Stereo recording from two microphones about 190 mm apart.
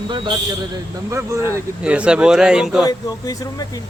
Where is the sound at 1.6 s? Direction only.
5° right (ahead or behind).